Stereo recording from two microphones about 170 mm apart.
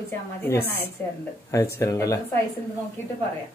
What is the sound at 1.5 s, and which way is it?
Speech, 15° left (ahead or behind).